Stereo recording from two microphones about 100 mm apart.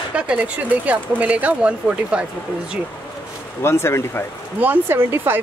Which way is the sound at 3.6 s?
25° left (ahead or behind).